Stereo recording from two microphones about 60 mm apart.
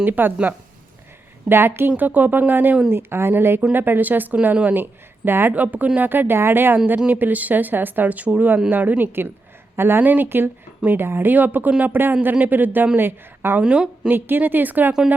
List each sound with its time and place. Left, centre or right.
0.0 s a woman's voice: right
1.5 s a woman's voice: right
13.6 s speech: centre
14.1 s a woman's voice: right